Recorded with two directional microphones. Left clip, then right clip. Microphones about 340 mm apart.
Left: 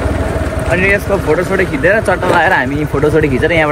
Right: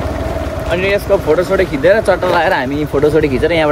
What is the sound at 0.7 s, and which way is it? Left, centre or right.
Speech, centre.